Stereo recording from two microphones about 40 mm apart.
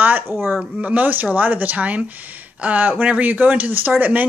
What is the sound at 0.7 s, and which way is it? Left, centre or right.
Speech, right.